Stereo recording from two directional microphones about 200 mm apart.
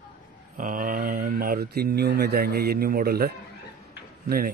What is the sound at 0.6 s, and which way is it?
Speech, 40° right (ahead or behind).